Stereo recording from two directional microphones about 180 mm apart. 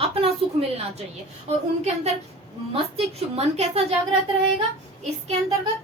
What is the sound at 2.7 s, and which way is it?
A woman's voice, 35° right (ahead or behind).